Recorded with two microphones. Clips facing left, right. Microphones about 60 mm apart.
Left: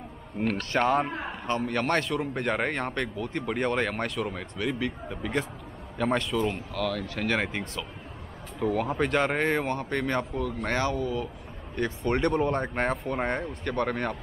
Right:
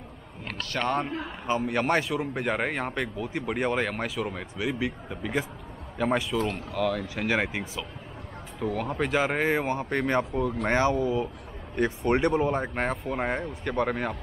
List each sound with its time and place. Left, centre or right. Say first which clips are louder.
0.4 s a man's voice: left 11 dB; left
1.5 s speech: right 2 dB; centre
6.8 s speech: right 3 dB; centre
8.5 s speech: left 2 dB; centre